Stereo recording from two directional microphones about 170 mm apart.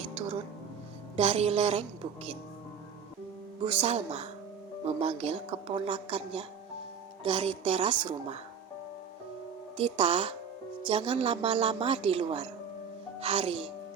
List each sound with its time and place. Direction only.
0.0 s music: 35° right (ahead or behind)
1.1 s speech: 35° right (ahead or behind)
3.6 s speech: 30° right (ahead or behind)
9.7 s speech: 35° right (ahead or behind)